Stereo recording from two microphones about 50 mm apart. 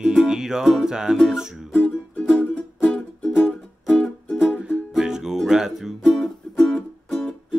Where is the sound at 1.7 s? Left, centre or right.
Centre.